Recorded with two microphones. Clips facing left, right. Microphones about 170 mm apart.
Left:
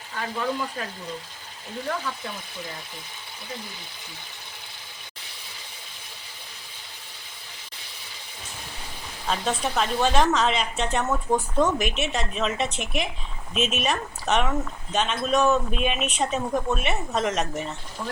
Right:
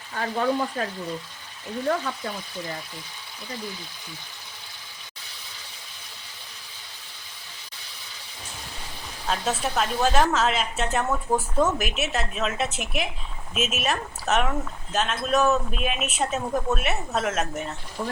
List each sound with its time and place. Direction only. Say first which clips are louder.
0.2 s speech: right 4 dB; 45° right (ahead or behind)
9.2 s speech: even; 5° right (ahead or behind)